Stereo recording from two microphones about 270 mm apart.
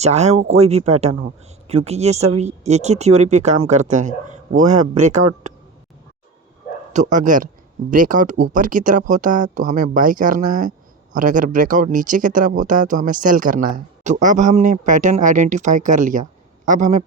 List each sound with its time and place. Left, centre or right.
0.0 s speech: right
6.9 s speech: right